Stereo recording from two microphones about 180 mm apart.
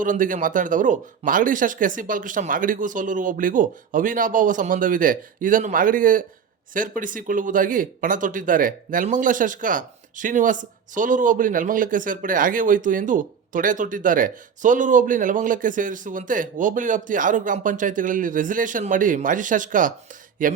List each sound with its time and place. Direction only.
0.0 s speech: 45° right (ahead or behind)